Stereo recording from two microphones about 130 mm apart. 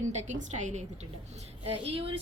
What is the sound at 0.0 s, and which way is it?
Speech, 70° right (ahead or behind).